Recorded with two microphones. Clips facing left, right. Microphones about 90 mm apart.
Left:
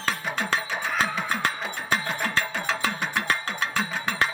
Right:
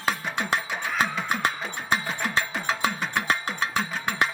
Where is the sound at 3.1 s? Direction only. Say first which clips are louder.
Right 1 dB; 20° right (ahead or behind).